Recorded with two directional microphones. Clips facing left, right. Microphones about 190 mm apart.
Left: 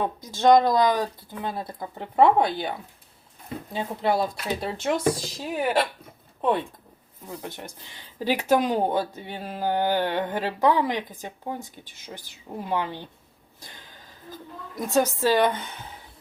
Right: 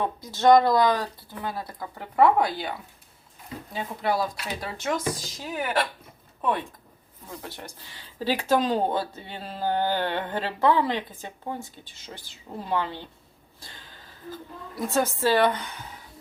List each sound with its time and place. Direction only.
0.0 s speech: 15° left (ahead or behind)
7.3 s speech: 20° left (ahead or behind)
13.6 s a sound: 20° left (ahead or behind)
14.9 s speech: 15° left (ahead or behind)